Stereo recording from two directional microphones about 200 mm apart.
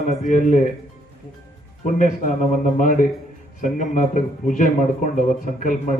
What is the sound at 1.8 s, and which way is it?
Speech, 40° left (ahead or behind).